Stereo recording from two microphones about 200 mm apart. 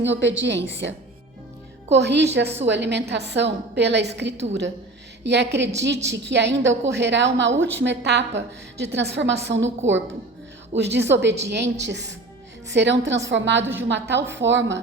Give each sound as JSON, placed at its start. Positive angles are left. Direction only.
{"t": 0.0, "sound": "a woman's voice", "side_deg": -65}